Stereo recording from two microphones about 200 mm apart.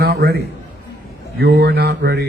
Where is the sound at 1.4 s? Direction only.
55° right (ahead or behind).